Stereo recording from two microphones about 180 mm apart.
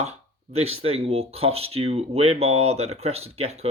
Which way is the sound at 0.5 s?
35° right (ahead or behind).